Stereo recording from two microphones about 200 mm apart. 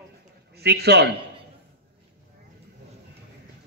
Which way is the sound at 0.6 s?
55° right (ahead or behind).